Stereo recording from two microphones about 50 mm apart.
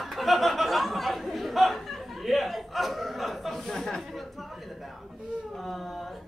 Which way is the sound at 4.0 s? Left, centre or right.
Centre.